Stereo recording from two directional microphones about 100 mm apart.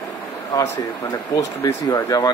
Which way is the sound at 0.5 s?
35° left (ahead or behind).